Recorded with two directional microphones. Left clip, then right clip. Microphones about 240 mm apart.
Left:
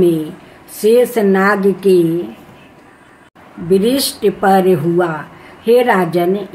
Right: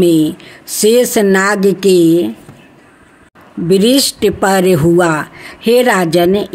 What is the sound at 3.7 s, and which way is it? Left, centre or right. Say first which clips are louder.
Speech: right 3 dB; right.